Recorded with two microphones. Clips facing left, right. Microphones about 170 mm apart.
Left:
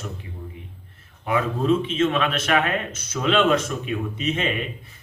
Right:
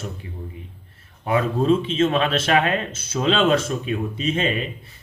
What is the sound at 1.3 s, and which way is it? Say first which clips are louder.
A man's voice: right 2 dB; 35° right (ahead or behind).